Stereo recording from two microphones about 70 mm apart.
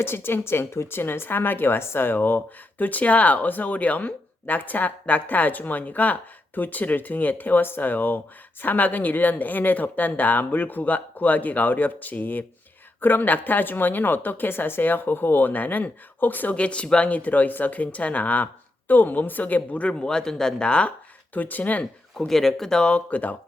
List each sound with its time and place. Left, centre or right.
0.0 s a woman's voice: left
22.3 s speech: centre; by 23.3 s left